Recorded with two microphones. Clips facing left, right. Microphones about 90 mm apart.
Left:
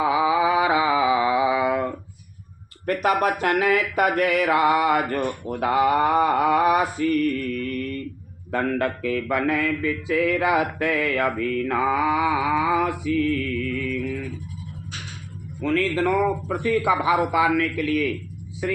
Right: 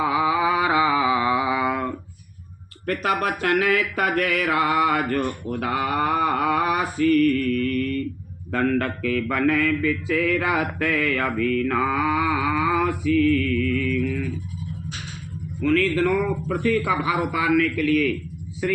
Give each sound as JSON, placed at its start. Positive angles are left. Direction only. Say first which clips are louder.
{"t": 0.0, "sound": "a sound", "louder": "left 1 dB", "side_deg": 20}
{"t": 2.8, "sound": "mantra", "louder": "left 2 dB", "side_deg": 20}
{"t": 15.6, "sound": "mantra", "louder": "right 2 dB", "side_deg": 25}